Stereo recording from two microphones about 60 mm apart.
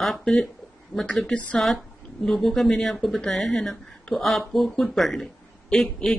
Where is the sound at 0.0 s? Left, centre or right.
Centre.